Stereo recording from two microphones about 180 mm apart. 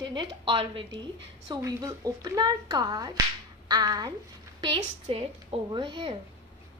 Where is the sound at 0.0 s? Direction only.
25° right (ahead or behind).